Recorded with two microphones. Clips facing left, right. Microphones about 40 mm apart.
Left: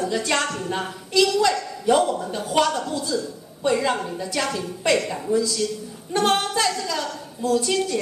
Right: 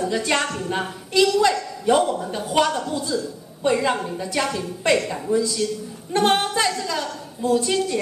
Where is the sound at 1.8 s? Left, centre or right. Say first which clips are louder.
Even; centre.